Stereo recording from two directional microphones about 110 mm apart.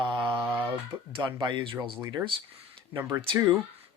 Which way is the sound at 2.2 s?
10° right (ahead or behind).